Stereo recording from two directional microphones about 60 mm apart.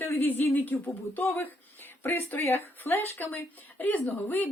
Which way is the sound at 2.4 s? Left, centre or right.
Left.